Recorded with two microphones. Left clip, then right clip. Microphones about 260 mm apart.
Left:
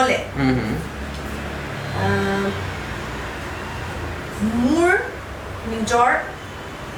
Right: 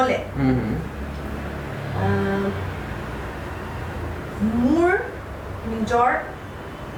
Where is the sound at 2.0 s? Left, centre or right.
Centre.